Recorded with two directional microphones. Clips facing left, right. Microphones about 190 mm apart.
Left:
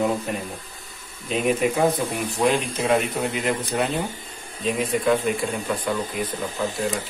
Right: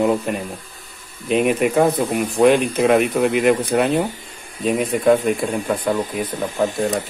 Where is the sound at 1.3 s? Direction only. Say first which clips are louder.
Right 5 dB; 60° right (ahead or behind).